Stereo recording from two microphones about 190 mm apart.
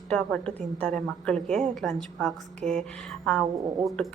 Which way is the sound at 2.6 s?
40° right (ahead or behind).